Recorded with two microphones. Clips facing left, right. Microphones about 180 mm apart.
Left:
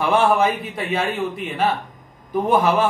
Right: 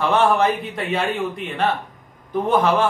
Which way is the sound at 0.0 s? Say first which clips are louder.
Even; 10° left (ahead or behind).